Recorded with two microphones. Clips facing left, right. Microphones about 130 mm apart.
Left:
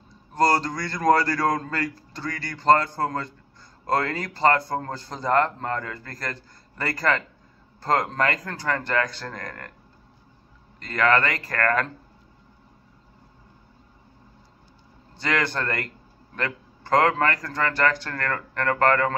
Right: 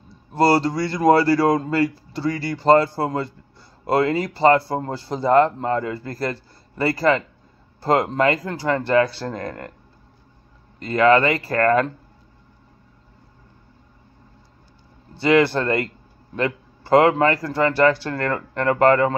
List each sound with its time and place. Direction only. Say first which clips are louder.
0.4 s a man's voice: right 5 dB; 30° right (ahead or behind)
10.8 s a man's voice: right 6 dB; 25° right (ahead or behind)
15.2 s a man's voice: right 9 dB; 25° right (ahead or behind)